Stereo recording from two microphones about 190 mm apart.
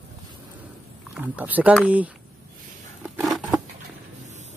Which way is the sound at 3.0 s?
Centre (ahead or behind).